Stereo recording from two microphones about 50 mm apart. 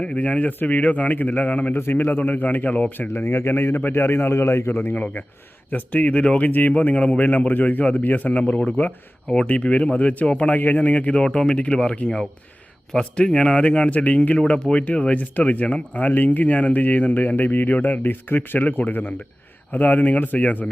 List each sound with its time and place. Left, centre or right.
0.0 s speech: left
1.7 s speech: left
3.1 s speech: left
3.9 s a man's voice: left
4.7 s speech: left
14.3 s speech: left
18.0 s speech: left